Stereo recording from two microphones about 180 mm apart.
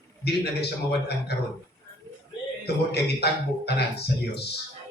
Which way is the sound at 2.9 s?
65° left (ahead or behind).